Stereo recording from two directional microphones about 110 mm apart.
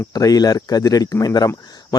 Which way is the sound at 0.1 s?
35° left (ahead or behind).